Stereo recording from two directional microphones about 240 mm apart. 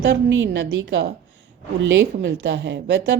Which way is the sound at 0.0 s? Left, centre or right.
Right.